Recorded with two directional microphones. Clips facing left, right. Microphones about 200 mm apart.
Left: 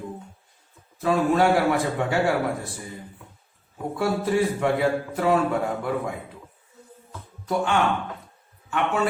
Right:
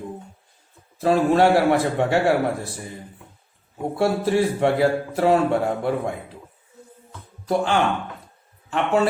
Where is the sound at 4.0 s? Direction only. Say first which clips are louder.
Right 3 dB; 30° right (ahead or behind).